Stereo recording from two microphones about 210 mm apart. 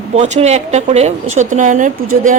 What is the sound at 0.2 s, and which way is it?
Speech, 30° right (ahead or behind).